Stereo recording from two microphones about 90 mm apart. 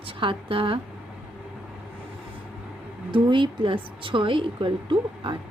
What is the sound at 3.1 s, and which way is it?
A woman's voice, 65° right (ahead or behind).